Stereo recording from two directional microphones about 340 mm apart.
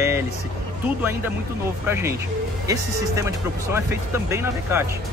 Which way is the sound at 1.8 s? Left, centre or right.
Centre.